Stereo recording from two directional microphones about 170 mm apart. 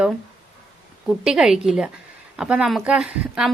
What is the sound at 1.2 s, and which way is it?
A woman's voice, 5° right (ahead or behind).